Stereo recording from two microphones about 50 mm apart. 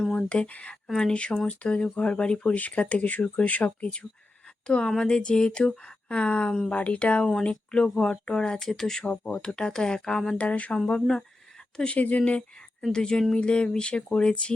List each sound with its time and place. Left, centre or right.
0.0 s speech: centre
2.6 s speech: left
4.6 s a woman's voice: centre
9.0 s speech: left
10.3 s speech: left
10.8 s speech: centre
11.9 s speech: left